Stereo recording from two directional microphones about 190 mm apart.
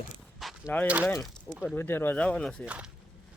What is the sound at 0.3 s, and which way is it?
Walk, centre (ahead or behind).